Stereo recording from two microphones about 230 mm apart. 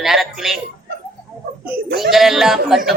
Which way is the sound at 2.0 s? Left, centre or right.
Centre.